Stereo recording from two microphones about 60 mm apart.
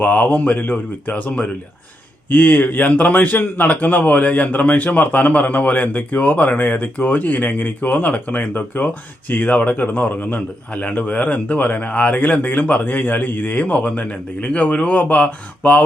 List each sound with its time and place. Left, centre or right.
0.0 s a man's voice: left